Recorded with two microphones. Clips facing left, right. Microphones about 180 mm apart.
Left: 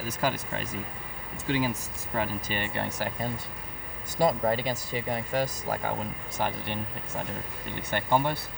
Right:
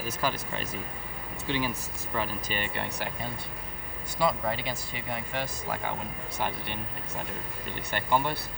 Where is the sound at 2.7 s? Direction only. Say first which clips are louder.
Left 3 dB; 40° left (ahead or behind).